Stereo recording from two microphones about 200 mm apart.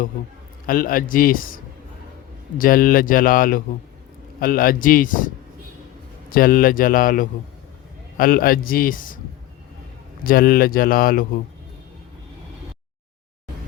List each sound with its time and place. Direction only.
0.7 s speech: 45° left (ahead or behind)
2.6 s speech: 45° left (ahead or behind)
6.3 s speech: 45° left (ahead or behind)
10.2 s speech: 45° left (ahead or behind)